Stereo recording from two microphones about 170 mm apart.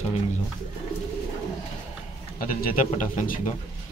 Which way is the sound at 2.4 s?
55° left (ahead or behind).